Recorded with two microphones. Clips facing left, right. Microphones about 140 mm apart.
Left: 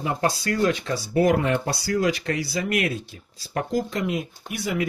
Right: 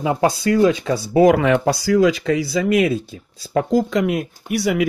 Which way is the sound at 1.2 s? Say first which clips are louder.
Right 8 dB; 90° right.